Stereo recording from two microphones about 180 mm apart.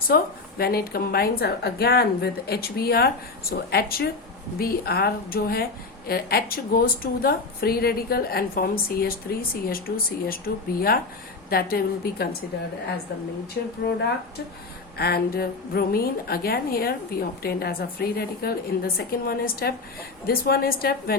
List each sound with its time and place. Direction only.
0.1 s a woman's voice: 55° left (ahead or behind)
13.6 s a woman's voice: 60° left (ahead or behind)
14.9 s a woman's voice: 60° left (ahead or behind)